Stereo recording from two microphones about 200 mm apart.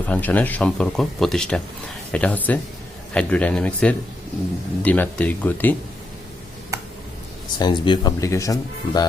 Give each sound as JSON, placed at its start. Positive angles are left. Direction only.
{"t": 0.0, "sound": "speech", "side_deg": 10}
{"t": 7.6, "sound": "speech", "side_deg": 20}